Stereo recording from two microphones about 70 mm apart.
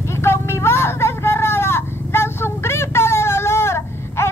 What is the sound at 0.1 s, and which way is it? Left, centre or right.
Vehicle, left.